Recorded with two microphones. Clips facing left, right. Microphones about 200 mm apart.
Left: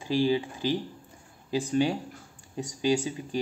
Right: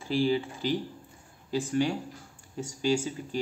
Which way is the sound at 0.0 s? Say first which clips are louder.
Left 1 dB; 15° left (ahead or behind).